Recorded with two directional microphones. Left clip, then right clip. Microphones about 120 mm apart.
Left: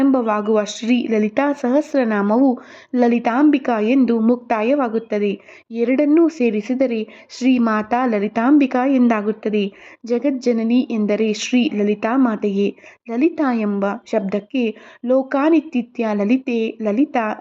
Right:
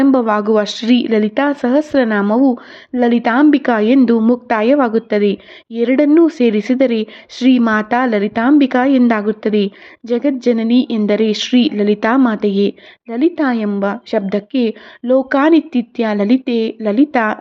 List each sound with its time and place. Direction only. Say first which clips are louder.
0.0 s a woman's voice: right 4 dB; 15° right (ahead or behind)
3.2 s a woman's voice: right 4 dB; 15° right (ahead or behind)